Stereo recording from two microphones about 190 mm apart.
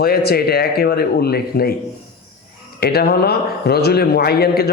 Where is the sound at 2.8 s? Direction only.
55° left (ahead or behind).